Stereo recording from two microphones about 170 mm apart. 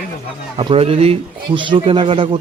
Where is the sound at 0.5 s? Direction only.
35° right (ahead or behind).